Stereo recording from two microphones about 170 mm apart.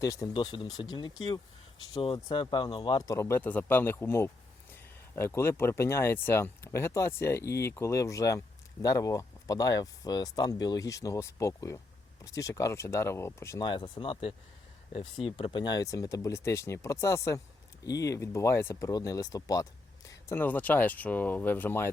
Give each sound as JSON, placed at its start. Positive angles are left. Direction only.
{"t": 0.0, "sound": "speech", "side_deg": 20}
{"t": 13.7, "sound": "speech", "side_deg": 25}